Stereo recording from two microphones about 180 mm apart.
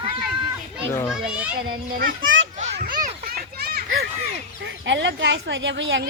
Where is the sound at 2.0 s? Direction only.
90° right.